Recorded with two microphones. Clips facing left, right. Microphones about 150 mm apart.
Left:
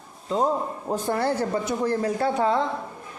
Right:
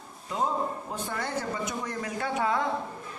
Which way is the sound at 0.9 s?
40° left (ahead or behind).